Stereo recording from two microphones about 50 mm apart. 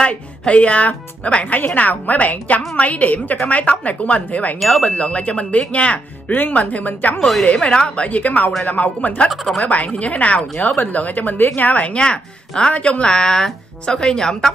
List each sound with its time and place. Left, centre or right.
0.0 s a woman's voice: left
4.6 s speech: centre
4.8 s a woman's voice: left
7.2 s speech: centre
7.4 s a woman's voice: left
9.3 s speech: centre
9.7 s a woman's voice: left; by 14.5 s centre